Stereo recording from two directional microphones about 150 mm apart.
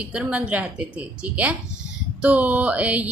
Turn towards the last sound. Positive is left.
turn(degrees=-10)  # may be behind; listen again after turning